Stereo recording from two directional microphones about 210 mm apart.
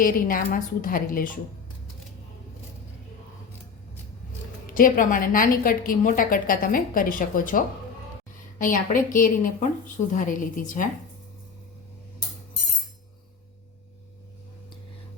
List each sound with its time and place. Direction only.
0.0 s a woman's voice: 40° left (ahead or behind)
4.6 s a woman's voice: 40° left (ahead or behind)